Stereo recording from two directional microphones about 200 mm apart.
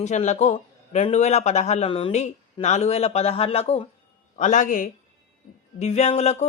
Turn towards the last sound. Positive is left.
turn(degrees=30)  # may be behind; listen again after turning